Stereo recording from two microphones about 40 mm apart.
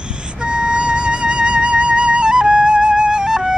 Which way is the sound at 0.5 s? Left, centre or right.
Right.